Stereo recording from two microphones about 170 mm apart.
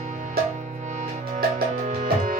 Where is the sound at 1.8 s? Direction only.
50° right (ahead or behind).